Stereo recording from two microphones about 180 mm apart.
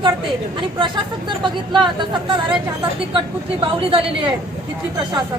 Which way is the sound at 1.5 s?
25° right (ahead or behind).